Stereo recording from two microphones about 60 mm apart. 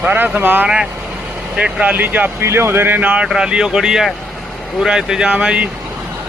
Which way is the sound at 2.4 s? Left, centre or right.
Right.